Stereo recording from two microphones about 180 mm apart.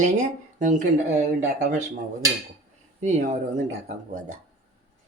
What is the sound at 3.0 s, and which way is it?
Speech, 45° right (ahead or behind).